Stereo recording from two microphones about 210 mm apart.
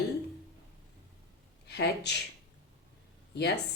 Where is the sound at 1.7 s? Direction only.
55° left (ahead or behind).